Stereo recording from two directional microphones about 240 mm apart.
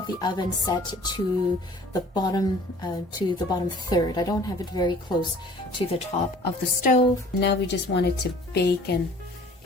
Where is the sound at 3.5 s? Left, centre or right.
Centre.